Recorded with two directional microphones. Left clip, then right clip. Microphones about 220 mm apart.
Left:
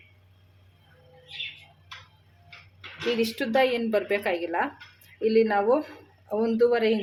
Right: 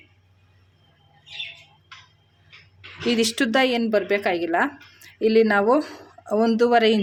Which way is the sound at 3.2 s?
40° right (ahead or behind).